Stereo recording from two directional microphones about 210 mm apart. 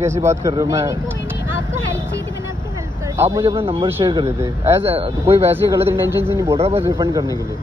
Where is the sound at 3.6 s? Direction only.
25° right (ahead or behind).